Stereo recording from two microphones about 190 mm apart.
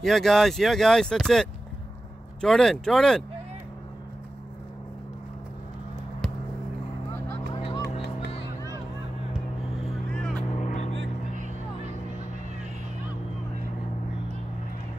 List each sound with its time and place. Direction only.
0.0 s speech: centre (ahead or behind)
7.2 s vehicle: 25° left (ahead or behind)
10.1 s vehicle: 5° left (ahead or behind)
10.5 s vehicle: 35° left (ahead or behind)